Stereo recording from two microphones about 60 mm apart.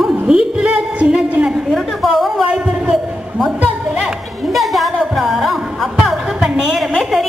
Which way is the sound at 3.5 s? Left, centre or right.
Right.